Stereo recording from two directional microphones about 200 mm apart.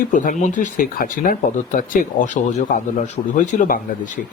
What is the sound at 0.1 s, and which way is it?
Speech, 40° left (ahead or behind).